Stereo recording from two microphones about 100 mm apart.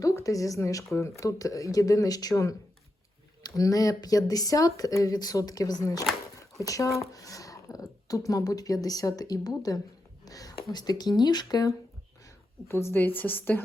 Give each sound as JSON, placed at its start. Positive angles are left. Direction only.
{"t": 0.0, "sound": "speech", "side_deg": 35}
{"t": 6.3, "sound": "a sound", "side_deg": 35}
{"t": 7.1, "sound": "speech", "side_deg": 35}
{"t": 12.2, "sound": "a woman's voice", "side_deg": 25}